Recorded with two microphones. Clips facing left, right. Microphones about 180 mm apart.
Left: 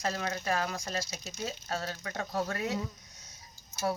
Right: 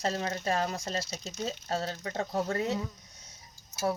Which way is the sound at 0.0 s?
30° right (ahead or behind).